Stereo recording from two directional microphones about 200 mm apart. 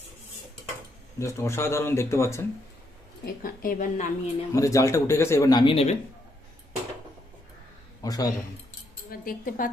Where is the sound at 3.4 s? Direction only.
45° left (ahead or behind).